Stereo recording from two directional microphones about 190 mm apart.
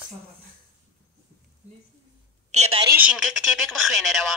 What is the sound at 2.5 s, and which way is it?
Speech, 35° right (ahead or behind).